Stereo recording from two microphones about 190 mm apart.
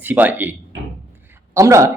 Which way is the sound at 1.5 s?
15° right (ahead or behind).